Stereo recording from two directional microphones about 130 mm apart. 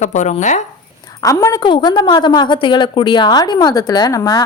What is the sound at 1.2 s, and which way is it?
A woman's voice, 25° left (ahead or behind).